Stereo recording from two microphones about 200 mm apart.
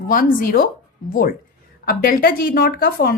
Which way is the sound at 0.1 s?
45° left (ahead or behind).